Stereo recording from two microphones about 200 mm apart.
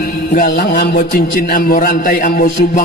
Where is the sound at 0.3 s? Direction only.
50° left (ahead or behind).